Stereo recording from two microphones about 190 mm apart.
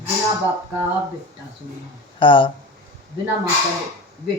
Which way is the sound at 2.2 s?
25° left (ahead or behind).